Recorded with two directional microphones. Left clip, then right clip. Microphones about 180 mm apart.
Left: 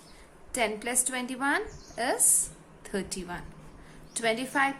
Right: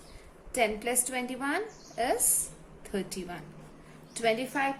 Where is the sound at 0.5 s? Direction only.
25° left (ahead or behind).